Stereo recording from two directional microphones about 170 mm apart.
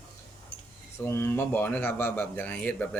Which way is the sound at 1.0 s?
15° left (ahead or behind).